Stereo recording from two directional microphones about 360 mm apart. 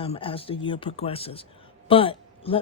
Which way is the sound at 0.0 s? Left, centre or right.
Centre.